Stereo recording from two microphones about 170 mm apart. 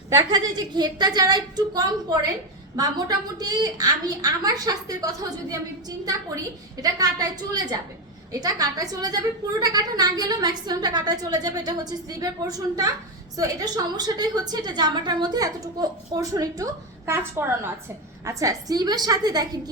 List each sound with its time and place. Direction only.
0.1 s a woman's voice: 25° right (ahead or behind)
6.8 s a woman's voice: 20° right (ahead or behind)
13.9 s a woman's voice: 25° right (ahead or behind)